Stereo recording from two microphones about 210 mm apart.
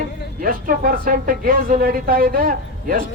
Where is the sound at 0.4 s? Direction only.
40° right (ahead or behind).